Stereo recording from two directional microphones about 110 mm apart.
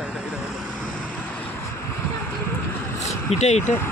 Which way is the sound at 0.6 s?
10° left (ahead or behind).